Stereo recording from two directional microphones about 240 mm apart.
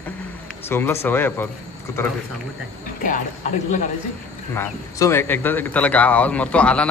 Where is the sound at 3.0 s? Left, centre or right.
Left.